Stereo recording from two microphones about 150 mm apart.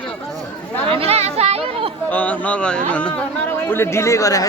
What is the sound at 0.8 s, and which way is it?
Speech, 40° right (ahead or behind).